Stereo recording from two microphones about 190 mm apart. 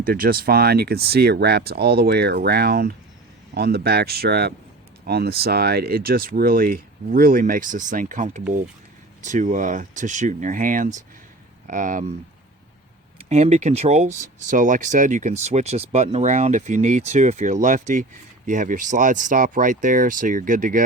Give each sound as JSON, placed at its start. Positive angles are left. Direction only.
{"t": 0.0, "sound": "speech", "side_deg": -50}
{"t": 13.2, "sound": "speech", "side_deg": -35}